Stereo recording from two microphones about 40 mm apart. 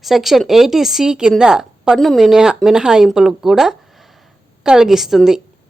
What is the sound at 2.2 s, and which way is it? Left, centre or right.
Speech, centre.